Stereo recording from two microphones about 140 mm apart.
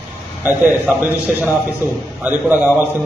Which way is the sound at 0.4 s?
10° right (ahead or behind).